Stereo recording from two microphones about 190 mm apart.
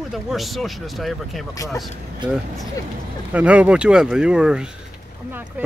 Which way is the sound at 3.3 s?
5° right (ahead or behind).